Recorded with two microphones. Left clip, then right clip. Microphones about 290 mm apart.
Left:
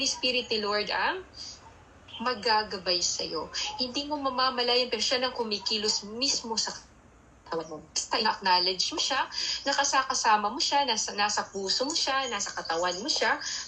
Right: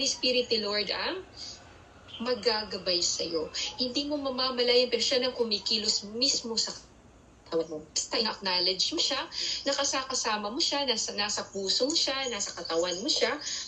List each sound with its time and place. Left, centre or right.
0.1 s a woman's voice: centre
2.2 s a woman's voice: centre